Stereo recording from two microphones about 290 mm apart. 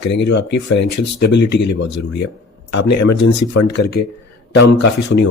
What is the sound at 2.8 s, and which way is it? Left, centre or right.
Speech, left.